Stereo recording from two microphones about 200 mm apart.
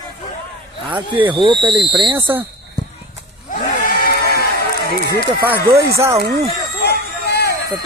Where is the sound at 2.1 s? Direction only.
10° right (ahead or behind).